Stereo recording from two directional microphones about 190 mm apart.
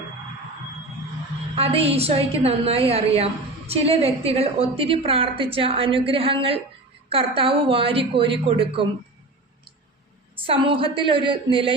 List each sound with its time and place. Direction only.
1.5 s a woman's voice: 30° right (ahead or behind)
10.3 s a woman's voice: 30° right (ahead or behind)